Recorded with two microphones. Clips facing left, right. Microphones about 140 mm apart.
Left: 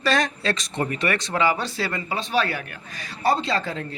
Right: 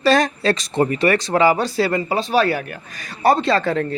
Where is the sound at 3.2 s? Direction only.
55° right (ahead or behind).